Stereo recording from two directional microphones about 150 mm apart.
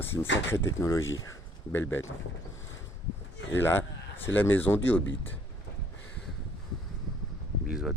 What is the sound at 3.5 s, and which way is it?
Speech, 15° left (ahead or behind).